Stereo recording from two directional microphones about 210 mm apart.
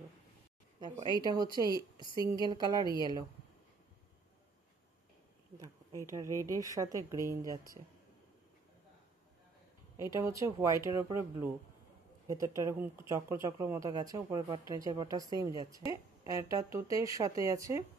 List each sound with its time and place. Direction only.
1.2 s speech: 20° right (ahead or behind)
6.4 s a woman's voice: 15° right (ahead or behind)
9.9 s a woman's voice: 15° right (ahead or behind)